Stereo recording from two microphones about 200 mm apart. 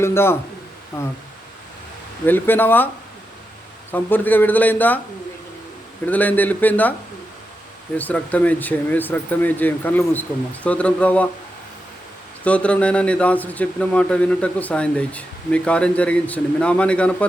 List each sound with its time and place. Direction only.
0.0 s speech: 10° left (ahead or behind)
2.2 s speech: 10° left (ahead or behind)
3.9 s speech: 10° left (ahead or behind)
6.1 s speech: 10° left (ahead or behind)
7.9 s speech: 10° left (ahead or behind)
12.5 s speech: 5° left (ahead or behind)